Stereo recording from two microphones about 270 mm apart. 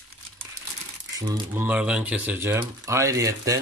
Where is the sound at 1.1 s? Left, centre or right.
Centre.